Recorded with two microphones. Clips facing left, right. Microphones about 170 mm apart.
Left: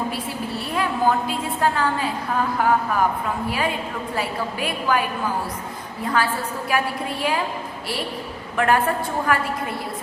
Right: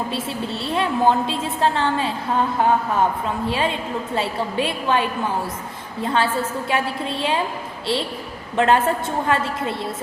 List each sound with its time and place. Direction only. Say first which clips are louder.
0.1 s a woman's voice: right 2 dB; 25° right (ahead or behind)
8.5 s a woman's voice: right 2 dB; 25° right (ahead or behind)